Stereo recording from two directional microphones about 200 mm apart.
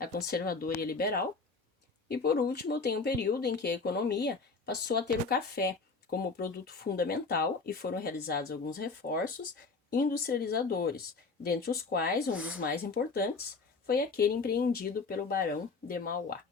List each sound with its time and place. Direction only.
0.0 s speech: 50° left (ahead or behind)
12.3 s speech: 5° right (ahead or behind)
12.5 s speech: 50° left (ahead or behind)